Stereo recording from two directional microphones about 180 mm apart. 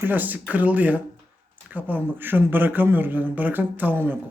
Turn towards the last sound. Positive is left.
turn(degrees=-10)  # may be behind; listen again after turning